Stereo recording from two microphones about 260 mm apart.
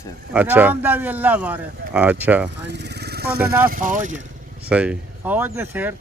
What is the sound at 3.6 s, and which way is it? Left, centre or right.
Speech, right.